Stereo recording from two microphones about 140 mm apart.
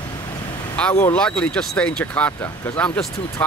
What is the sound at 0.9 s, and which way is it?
Speech, 20° left (ahead or behind).